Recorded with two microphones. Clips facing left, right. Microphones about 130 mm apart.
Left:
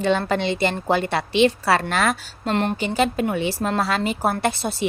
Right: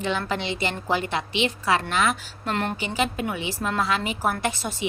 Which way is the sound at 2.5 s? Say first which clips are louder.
Left 5 dB; 30° left (ahead or behind).